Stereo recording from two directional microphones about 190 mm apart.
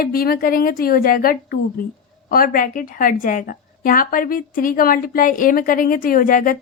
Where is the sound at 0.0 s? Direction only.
50° left (ahead or behind).